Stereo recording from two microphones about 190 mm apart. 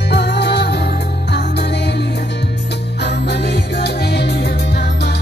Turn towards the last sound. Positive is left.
turn(degrees=60)  # may be behind; listen again after turning